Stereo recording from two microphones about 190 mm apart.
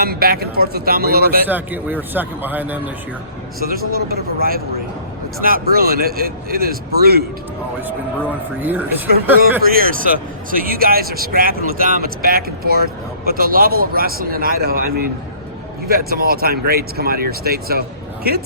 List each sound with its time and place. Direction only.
0.0 s speech: 55° right (ahead or behind)
1.5 s a man's voice: 10° right (ahead or behind)
3.6 s speech: 50° right (ahead or behind)
9.4 s speech: 50° right (ahead or behind)